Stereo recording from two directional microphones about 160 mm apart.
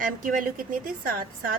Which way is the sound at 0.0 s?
55° right (ahead or behind).